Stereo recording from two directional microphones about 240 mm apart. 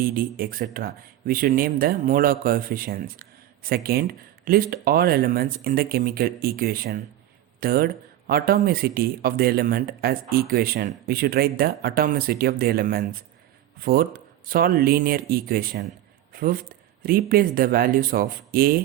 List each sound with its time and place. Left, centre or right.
0.0 s speech: right